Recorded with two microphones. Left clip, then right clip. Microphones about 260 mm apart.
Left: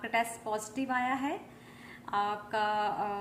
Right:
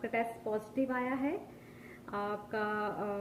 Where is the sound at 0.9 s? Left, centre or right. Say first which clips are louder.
Left 4 dB; centre.